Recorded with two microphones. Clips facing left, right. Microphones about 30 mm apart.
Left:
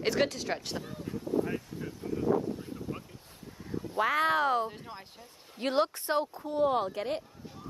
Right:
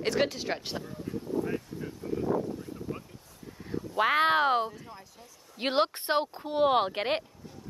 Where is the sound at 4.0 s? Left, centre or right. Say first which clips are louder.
Right 3 dB; right.